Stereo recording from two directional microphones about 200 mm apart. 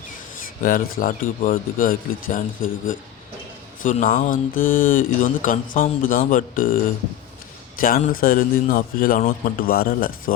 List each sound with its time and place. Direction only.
0.4 s speech: 45° left (ahead or behind)
7.8 s speech: 45° left (ahead or behind)